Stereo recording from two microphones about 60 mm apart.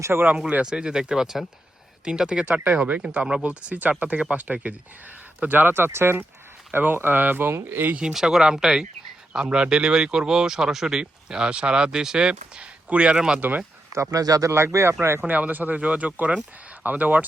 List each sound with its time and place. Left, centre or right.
0.0 s speech: right
0.3 s speech: centre; by 7.9 s right
7.9 s speech: centre
13.4 s speech: right
13.9 s speech: right
14.5 s speech: right
15.3 s speech: right